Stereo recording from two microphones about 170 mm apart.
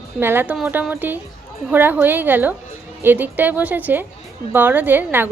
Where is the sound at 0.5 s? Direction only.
Centre (ahead or behind).